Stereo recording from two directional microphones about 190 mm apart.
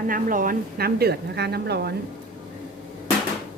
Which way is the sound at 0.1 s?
45° right (ahead or behind).